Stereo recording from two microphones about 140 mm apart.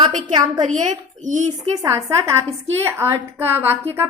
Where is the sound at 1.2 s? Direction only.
60° right (ahead or behind).